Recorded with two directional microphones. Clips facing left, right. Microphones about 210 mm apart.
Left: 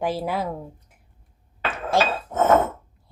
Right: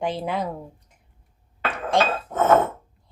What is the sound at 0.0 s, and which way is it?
Speech, 5° left (ahead or behind).